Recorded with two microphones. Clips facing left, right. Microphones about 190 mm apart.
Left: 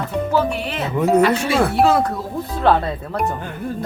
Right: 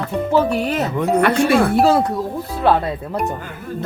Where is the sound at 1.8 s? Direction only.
30° right (ahead or behind).